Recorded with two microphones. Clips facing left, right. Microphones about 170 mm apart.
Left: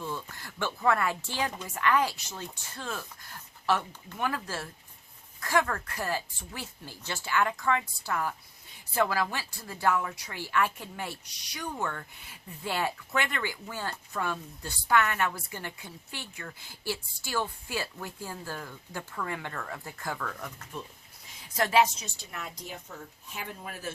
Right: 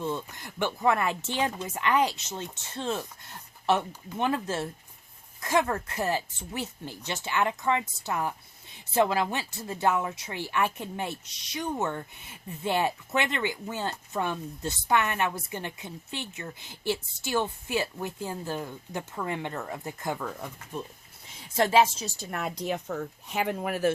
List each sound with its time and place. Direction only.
0.0 s a woman's voice: 20° right (ahead or behind)
22.2 s speech: 55° right (ahead or behind); by 23.9 s 75° right (ahead or behind)